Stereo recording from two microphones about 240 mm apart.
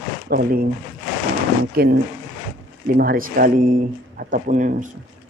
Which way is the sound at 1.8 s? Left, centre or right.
Right.